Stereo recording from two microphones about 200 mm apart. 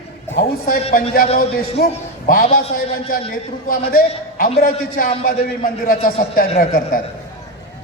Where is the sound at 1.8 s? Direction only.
45° left (ahead or behind).